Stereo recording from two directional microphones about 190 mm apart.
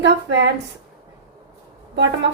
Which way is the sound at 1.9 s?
70° right (ahead or behind).